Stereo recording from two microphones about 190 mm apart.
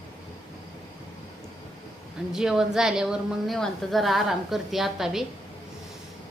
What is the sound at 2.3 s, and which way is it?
A woman's voice, 5° right (ahead or behind).